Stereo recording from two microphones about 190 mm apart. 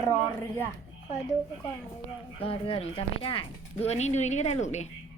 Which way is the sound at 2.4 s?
30° left (ahead or behind).